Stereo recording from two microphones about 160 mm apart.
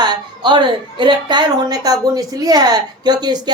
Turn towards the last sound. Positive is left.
turn(degrees=-25)  # may be behind; listen again after turning